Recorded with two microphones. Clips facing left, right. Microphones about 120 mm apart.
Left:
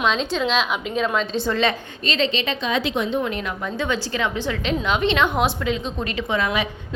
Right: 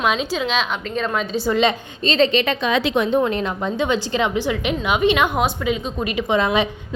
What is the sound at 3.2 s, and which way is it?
Speech, 35° right (ahead or behind).